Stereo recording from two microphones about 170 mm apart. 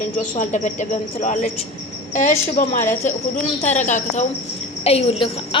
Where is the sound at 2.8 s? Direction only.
15° left (ahead or behind).